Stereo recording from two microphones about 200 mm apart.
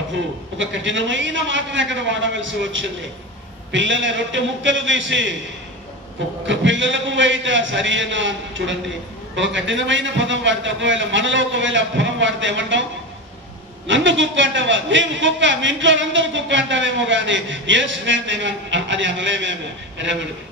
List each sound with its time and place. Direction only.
0.6 s a man's voice: 70° right (ahead or behind)
6.4 s a man's voice: 65° right (ahead or behind)
13.8 s a man's voice: 65° right (ahead or behind)